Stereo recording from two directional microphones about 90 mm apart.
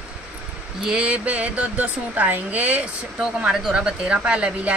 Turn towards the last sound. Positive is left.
turn(degrees=-15)  # may be behind; listen again after turning